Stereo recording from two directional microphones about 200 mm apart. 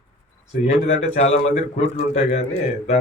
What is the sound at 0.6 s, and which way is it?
A man's voice, 30° left (ahead or behind).